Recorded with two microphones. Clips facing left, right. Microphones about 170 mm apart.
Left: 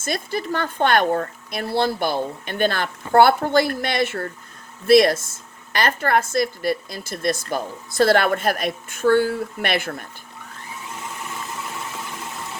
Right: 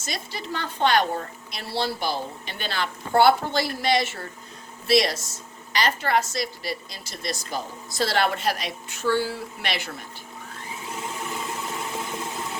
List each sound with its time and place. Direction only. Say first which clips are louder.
0.0 s speech: left 8 dB; 50° left (ahead or behind)